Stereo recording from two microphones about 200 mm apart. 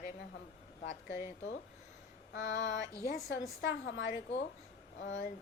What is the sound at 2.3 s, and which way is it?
Speech, 60° left (ahead or behind).